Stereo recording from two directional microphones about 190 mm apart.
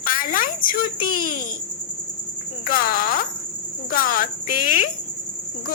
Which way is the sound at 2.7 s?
45° left (ahead or behind).